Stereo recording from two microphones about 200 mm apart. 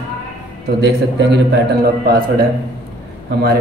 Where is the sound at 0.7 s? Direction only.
60° right (ahead or behind).